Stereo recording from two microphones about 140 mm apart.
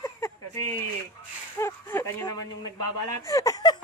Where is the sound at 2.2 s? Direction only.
30° left (ahead or behind).